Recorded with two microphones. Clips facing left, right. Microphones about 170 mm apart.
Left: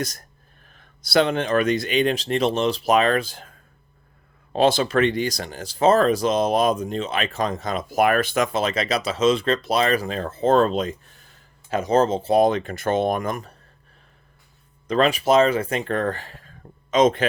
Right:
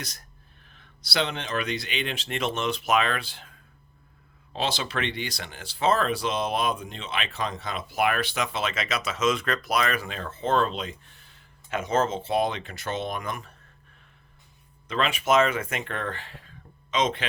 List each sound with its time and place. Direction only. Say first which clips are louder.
0.0 s speech: left 12 dB; 45° left (ahead or behind)
4.5 s speech: left 11 dB; 50° left (ahead or behind)
14.8 s speech: left 6 dB; 40° left (ahead or behind)